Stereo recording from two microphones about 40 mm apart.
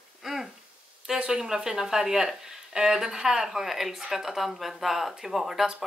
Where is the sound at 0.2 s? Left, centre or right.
Centre.